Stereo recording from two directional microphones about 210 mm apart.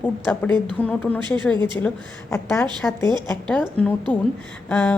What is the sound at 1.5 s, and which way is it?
Speech, 20° right (ahead or behind).